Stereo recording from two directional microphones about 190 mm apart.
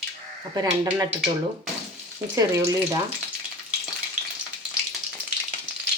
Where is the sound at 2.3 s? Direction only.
15° right (ahead or behind).